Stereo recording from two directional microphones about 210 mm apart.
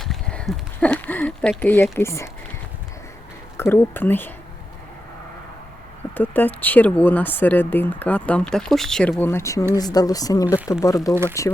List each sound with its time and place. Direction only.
0.0 s speech: 5° left (ahead or behind)
3.6 s speech: 10° left (ahead or behind)
6.1 s speech: 10° left (ahead or behind)